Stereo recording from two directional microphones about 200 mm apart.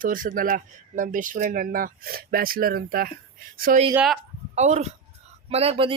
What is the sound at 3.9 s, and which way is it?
Speech, centre (ahead or behind).